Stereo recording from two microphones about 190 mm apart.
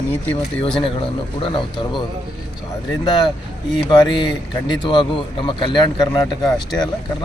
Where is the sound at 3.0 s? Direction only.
25° left (ahead or behind).